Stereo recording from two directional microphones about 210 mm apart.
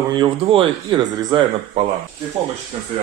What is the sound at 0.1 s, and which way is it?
Speech, 25° right (ahead or behind).